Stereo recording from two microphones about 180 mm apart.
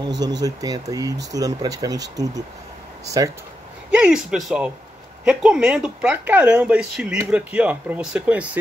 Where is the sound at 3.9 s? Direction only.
5° right (ahead or behind).